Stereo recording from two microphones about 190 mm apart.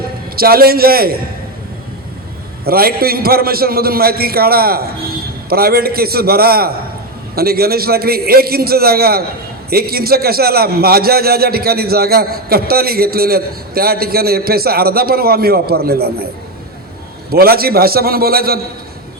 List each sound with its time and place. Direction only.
0.3 s a man's voice: 50° right (ahead or behind)
2.6 s a man's voice: 55° right (ahead or behind)
17.3 s a man's voice: 55° right (ahead or behind)